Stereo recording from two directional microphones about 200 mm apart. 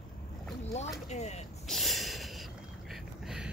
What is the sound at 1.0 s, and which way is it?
Speech, 35° left (ahead or behind).